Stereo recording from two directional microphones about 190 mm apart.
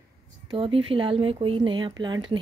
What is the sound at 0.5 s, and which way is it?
Speech, 30° right (ahead or behind).